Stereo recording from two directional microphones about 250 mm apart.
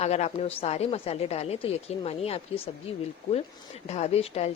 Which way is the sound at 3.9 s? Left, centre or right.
Left.